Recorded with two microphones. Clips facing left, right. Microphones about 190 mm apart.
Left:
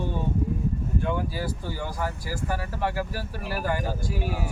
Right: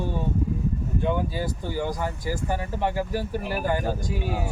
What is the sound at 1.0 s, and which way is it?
Speech, 20° right (ahead or behind).